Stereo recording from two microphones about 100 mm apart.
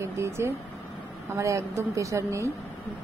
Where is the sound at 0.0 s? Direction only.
25° right (ahead or behind).